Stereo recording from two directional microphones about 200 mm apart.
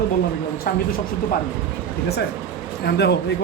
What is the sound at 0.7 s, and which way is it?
Speech, 45° left (ahead or behind).